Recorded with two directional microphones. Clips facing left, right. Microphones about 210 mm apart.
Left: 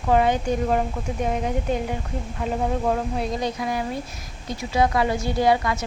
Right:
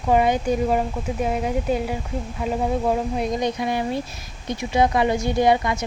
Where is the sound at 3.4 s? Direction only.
20° right (ahead or behind).